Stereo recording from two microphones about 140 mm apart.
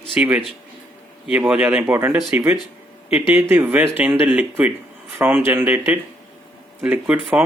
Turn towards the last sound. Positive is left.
turn(degrees=-10)  # may be behind; listen again after turning